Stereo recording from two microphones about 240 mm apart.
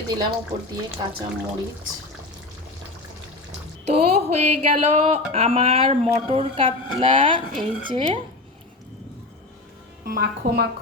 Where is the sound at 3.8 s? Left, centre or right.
Right.